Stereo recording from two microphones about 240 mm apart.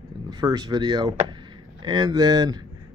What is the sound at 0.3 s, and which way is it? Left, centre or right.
Speech, centre.